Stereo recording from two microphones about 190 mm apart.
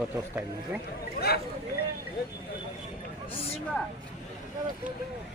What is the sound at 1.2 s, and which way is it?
Speech, 55° left (ahead or behind).